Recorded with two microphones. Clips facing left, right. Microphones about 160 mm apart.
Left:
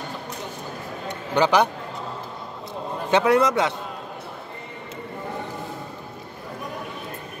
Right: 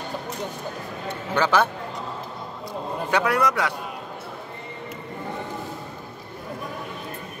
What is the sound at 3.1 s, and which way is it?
Speech, 25° left (ahead or behind).